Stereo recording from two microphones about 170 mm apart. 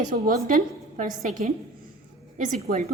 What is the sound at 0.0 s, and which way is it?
A woman's voice, 55° right (ahead or behind).